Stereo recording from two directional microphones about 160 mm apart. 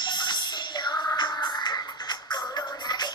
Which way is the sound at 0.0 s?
25° left (ahead or behind).